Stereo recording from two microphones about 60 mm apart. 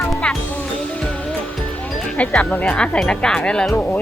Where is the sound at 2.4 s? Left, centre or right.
Centre.